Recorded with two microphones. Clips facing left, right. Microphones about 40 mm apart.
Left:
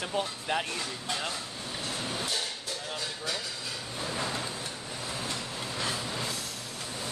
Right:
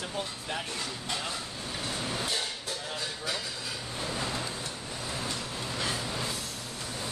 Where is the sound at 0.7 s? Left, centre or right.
Centre.